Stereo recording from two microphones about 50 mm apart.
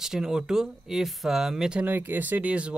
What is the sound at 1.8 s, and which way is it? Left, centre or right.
Speech, right.